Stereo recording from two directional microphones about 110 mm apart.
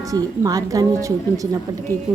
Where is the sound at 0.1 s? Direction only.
35° right (ahead or behind).